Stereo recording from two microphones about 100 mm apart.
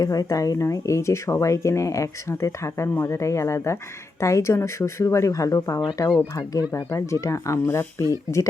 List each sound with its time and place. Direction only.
0.0 s speech: 40° left (ahead or behind)